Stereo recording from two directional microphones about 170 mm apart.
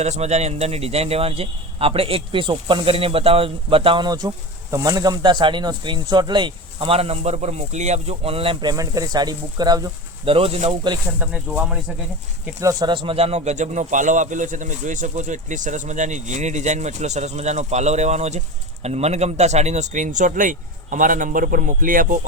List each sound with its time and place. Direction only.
0.0 s a man's voice: 40° right (ahead or behind)
8.7 s speech: 20° right (ahead or behind)
10.2 s a man's voice: 35° right (ahead or behind)
11.2 s speech: 10° right (ahead or behind)
12.5 s speech: 20° right (ahead or behind); by 22.3 s 50° right (ahead or behind)